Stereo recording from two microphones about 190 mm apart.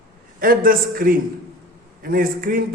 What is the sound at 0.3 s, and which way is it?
A man's voice, 50° right (ahead or behind).